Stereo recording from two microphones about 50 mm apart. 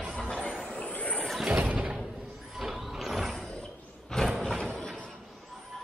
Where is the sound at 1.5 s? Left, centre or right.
Right.